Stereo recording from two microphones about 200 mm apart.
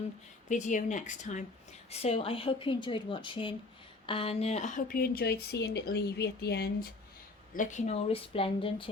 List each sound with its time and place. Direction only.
0.4 s a woman's voice: 40° left (ahead or behind); by 6.7 s 55° left (ahead or behind)
7.5 s speech: 40° left (ahead or behind)